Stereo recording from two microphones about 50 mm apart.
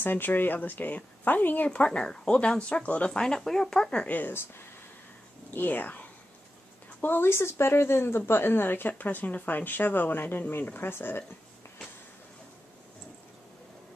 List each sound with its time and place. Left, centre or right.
0.0 s speech: left
1.9 s speech: centre
3.2 s speech: centre
4.3 s speech: left
5.5 s speech: left
7.2 s speech: left